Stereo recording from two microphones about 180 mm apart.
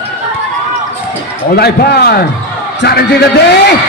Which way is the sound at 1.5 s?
60° left (ahead or behind).